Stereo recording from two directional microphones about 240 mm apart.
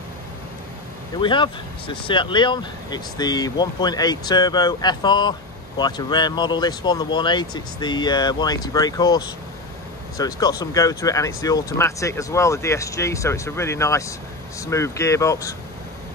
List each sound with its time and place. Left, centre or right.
1.2 s speech: centre